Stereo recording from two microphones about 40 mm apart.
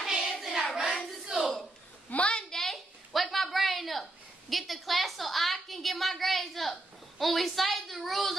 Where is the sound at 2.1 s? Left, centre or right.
Left.